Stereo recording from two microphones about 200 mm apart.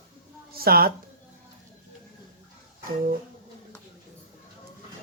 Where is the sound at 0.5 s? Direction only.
50° right (ahead or behind).